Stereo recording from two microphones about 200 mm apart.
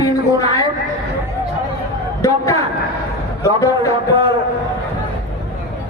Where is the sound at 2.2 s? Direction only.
15° left (ahead or behind).